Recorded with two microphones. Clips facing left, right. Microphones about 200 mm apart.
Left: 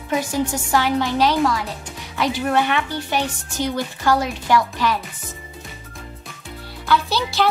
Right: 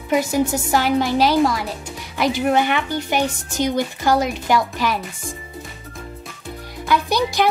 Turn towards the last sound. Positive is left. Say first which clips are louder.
# right 2 dB
turn(degrees=-15)  # may be behind; listen again after turning